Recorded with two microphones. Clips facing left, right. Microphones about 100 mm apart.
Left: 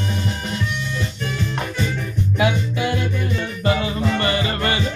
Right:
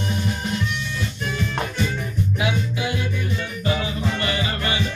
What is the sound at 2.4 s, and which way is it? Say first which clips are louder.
Music: left 6 dB; 50° left (ahead or behind).